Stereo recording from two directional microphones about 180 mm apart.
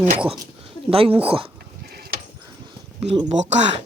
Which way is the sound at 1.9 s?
60° right (ahead or behind).